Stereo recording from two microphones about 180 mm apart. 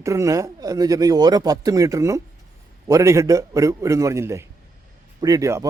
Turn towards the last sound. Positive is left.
turn(degrees=-20)  # may be behind; listen again after turning